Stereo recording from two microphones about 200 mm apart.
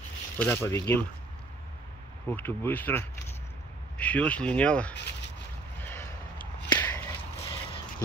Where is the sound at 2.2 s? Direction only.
10° left (ahead or behind).